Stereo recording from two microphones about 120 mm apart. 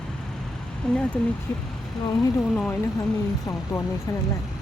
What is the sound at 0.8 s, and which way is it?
Speech, 5° left (ahead or behind).